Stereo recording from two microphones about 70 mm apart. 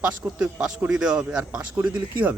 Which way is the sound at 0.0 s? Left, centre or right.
Centre.